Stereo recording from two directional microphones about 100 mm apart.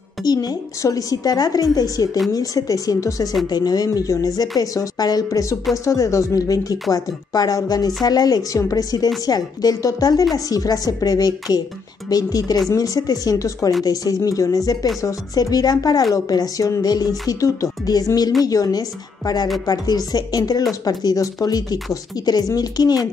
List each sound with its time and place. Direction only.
0.2 s a woman's voice: 40° left (ahead or behind)